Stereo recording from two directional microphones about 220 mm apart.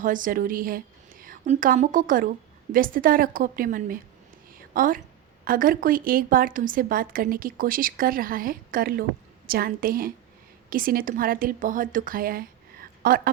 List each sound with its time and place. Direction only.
0.0 s a woman's voice: 40° right (ahead or behind)
4.5 s a sound: 40° right (ahead or behind)
5.5 s a woman's voice: 40° right (ahead or behind)